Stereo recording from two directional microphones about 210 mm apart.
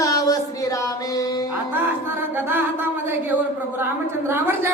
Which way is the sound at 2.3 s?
10° right (ahead or behind).